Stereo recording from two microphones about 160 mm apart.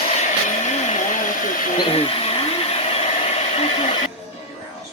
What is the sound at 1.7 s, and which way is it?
Hair dryer, 35° left (ahead or behind).